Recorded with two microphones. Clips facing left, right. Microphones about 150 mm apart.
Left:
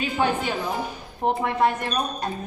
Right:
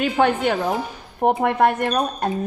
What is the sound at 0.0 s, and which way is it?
A woman's voice, 60° right (ahead or behind).